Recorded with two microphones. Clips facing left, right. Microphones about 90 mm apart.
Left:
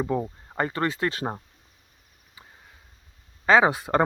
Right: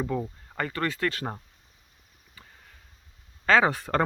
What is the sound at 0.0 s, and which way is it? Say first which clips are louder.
Speech: left 3 dB; 20° left (ahead or behind).